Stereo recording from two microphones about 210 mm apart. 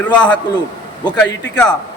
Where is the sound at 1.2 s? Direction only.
55° left (ahead or behind).